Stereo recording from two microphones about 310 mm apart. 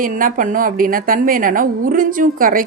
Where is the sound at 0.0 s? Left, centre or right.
Right.